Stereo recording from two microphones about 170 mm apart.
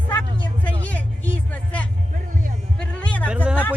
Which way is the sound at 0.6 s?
10° left (ahead or behind).